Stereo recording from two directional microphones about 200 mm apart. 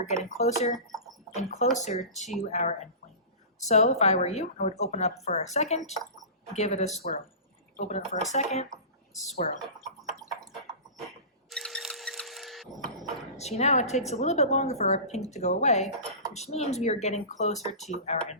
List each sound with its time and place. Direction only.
0.0 s a woman's voice: 35° left (ahead or behind)
11.4 s wood: centre (ahead or behind)
13.3 s a woman's voice: 35° left (ahead or behind)